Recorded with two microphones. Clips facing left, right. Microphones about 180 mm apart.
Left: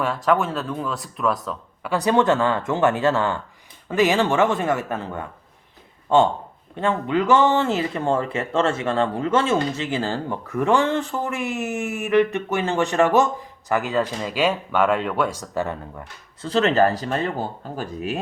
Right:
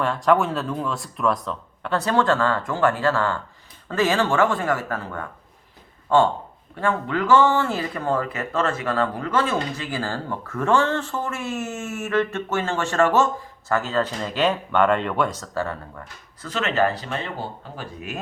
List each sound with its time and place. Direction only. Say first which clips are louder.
0.0 s speech: right 1 dB; 5° left (ahead or behind)
2.0 s speech: left 2 dB; 20° left (ahead or behind); by 15.4 s 5° left (ahead or behind)
15.4 s speech: left 2 dB; 20° left (ahead or behind)
16.5 s speech: left 4 dB; 35° left (ahead or behind)